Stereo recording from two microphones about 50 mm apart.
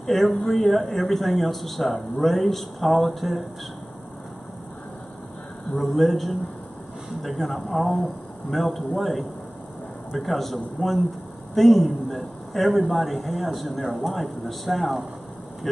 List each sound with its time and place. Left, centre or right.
0.0 s a man's voice: centre
5.8 s a man's voice: centre